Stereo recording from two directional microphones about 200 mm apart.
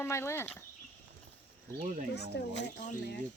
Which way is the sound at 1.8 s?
40° right (ahead or behind).